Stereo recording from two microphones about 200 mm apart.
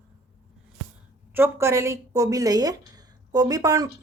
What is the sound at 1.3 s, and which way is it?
Speech, 10° right (ahead or behind).